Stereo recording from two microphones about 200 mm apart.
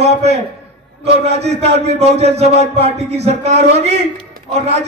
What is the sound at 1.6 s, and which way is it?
A man's voice, 30° right (ahead or behind).